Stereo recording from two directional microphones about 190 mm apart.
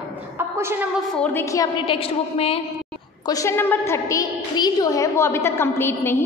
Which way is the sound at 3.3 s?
15° left (ahead or behind).